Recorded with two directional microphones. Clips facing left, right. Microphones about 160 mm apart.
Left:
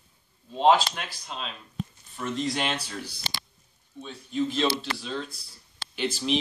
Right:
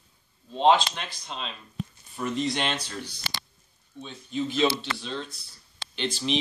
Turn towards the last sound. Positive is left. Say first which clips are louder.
# left 1 dB
turn(degrees=5)  # may be behind; listen again after turning